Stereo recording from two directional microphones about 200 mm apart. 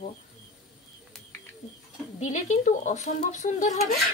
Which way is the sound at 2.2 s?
40° left (ahead or behind).